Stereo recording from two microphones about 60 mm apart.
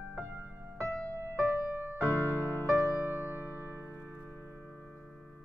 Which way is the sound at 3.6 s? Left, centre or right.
Left.